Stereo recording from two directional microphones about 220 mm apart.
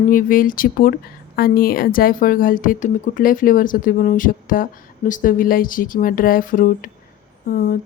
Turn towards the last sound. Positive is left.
turn(degrees=40)  # may be behind; listen again after turning